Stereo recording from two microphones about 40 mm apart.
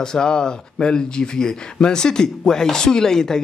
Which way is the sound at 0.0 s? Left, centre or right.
Centre.